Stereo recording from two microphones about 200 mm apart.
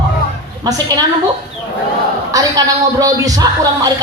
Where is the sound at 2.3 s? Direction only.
15° right (ahead or behind).